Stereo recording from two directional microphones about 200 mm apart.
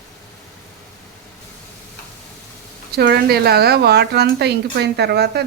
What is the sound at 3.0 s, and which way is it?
Speech, 50° right (ahead or behind).